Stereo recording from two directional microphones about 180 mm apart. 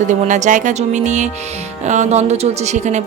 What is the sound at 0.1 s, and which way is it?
Speech, 40° right (ahead or behind).